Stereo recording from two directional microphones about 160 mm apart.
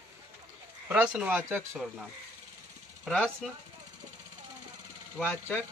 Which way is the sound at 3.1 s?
5° left (ahead or behind).